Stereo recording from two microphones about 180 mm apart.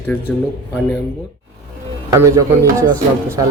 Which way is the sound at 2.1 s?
15° right (ahead or behind).